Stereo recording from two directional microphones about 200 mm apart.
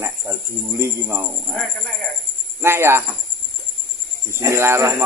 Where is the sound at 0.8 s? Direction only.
15° right (ahead or behind).